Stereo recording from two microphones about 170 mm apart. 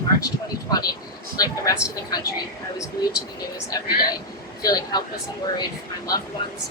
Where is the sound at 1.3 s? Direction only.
20° left (ahead or behind).